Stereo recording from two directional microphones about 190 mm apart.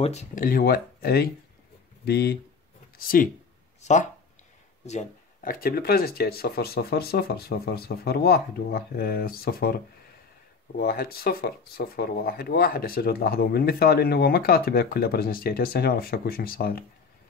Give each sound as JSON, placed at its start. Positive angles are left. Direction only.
{"t": 0.0, "sound": "speech", "side_deg": 35}
{"t": 3.8, "sound": "speech", "side_deg": 40}
{"t": 10.8, "sound": "speech", "side_deg": 55}